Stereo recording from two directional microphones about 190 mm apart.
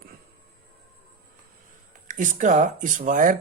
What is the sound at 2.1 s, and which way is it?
Speech, 40° right (ahead or behind).